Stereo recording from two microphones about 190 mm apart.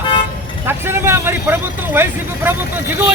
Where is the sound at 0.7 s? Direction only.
10° right (ahead or behind).